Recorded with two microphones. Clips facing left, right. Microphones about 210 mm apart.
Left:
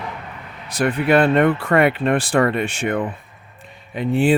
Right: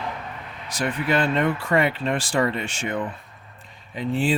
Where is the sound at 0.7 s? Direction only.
60° left (ahead or behind).